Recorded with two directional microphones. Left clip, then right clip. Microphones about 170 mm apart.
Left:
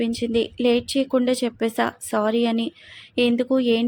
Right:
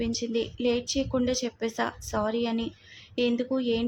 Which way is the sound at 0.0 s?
30° left (ahead or behind).